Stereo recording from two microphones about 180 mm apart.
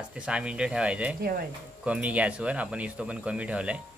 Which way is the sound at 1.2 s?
60° right (ahead or behind).